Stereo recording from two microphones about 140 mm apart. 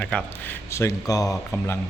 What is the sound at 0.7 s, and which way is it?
Speech, 20° left (ahead or behind).